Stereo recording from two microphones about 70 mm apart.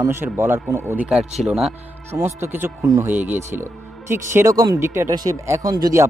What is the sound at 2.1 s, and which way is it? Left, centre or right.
A man's voice, right.